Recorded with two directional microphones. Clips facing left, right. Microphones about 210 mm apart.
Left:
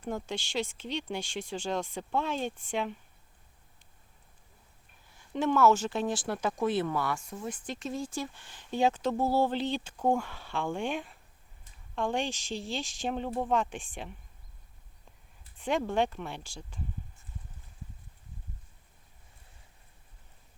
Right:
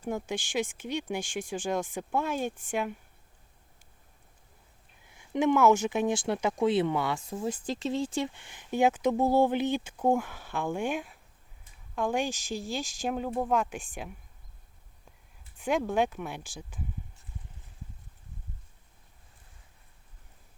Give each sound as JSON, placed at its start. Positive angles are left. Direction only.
{"t": 0.0, "sound": "speech", "side_deg": -10}
{"t": 5.3, "sound": "speech", "side_deg": -15}
{"t": 7.3, "sound": "speech", "side_deg": -30}
{"t": 15.6, "sound": "speech", "side_deg": 0}